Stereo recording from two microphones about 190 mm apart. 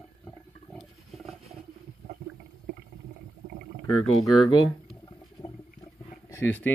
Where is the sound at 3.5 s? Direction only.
50° right (ahead or behind).